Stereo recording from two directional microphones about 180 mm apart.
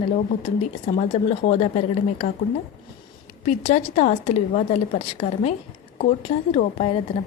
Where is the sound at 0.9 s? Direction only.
40° left (ahead or behind).